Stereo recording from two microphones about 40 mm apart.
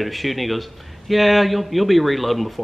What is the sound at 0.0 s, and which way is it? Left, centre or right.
A man's voice, centre.